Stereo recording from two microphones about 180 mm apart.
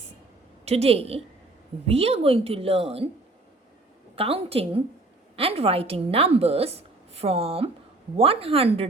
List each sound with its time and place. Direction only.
0.6 s a woman's voice: 35° right (ahead or behind)
4.1 s a woman's voice: 30° right (ahead or behind)